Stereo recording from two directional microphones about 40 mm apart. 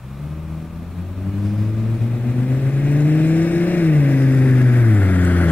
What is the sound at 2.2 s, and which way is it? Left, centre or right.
Vehicle, left.